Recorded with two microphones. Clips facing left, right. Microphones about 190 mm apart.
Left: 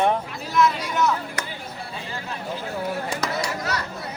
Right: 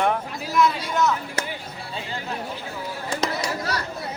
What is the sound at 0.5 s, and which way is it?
Speech, 5° left (ahead or behind).